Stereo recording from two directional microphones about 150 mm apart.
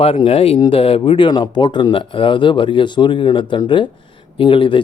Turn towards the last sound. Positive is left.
turn(degrees=35)  # may be behind; listen again after turning